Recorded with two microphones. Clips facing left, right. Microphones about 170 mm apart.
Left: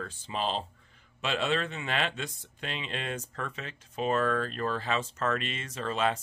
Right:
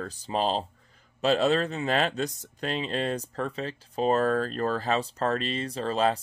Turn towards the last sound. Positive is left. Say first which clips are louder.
# right 4 dB
turn(degrees=-35)  # may be behind; listen again after turning